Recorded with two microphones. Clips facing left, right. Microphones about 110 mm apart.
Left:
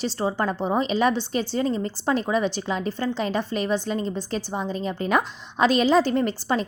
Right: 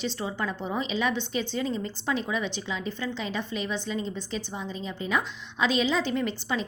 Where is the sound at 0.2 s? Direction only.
40° left (ahead or behind).